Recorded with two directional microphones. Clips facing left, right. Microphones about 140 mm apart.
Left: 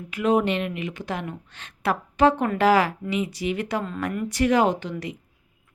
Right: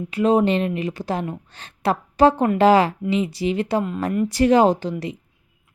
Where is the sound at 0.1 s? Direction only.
30° right (ahead or behind).